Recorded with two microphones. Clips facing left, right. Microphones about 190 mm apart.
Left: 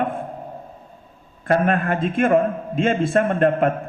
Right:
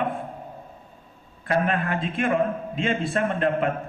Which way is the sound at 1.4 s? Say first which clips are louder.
Left 5 dB; 45° left (ahead or behind).